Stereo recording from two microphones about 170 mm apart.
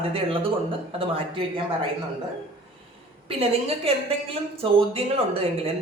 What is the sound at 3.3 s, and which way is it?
A woman's voice, 35° right (ahead or behind).